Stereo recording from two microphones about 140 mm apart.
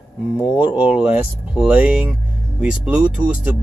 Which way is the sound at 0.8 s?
10° right (ahead or behind).